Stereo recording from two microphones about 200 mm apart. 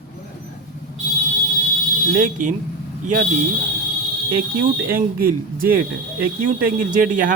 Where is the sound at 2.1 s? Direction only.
40° right (ahead or behind).